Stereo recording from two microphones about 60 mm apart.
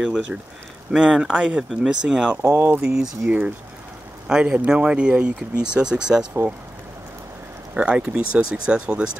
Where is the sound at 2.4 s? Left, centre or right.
Right.